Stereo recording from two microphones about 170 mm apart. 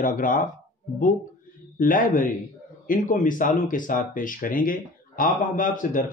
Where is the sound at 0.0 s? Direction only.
50° left (ahead or behind).